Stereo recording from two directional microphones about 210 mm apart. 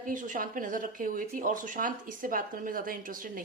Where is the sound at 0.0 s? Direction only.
40° right (ahead or behind).